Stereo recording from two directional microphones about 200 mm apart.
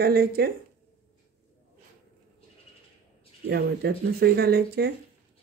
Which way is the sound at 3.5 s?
55° right (ahead or behind).